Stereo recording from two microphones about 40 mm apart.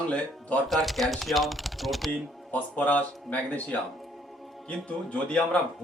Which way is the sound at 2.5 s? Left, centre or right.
Left.